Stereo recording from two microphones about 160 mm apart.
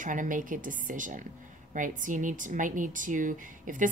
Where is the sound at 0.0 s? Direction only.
55° right (ahead or behind).